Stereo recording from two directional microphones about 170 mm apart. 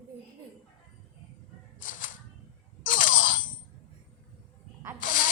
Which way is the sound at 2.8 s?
50° left (ahead or behind).